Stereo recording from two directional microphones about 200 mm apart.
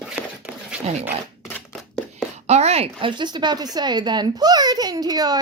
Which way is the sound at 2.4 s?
35° right (ahead or behind).